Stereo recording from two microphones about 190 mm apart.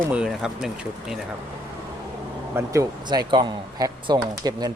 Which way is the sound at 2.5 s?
15° right (ahead or behind).